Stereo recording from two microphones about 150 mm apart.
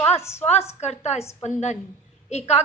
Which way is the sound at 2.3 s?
45° left (ahead or behind).